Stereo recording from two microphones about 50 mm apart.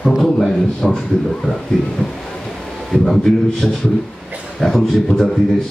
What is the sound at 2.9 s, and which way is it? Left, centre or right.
A man's voice, centre.